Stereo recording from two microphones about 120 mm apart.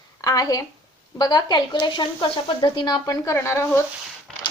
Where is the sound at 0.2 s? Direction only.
30° left (ahead or behind).